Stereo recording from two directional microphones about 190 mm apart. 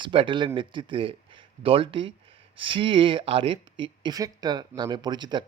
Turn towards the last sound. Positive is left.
turn(degrees=-25)  # may be behind; listen again after turning